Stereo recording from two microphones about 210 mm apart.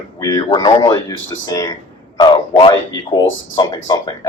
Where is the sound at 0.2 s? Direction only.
15° left (ahead or behind).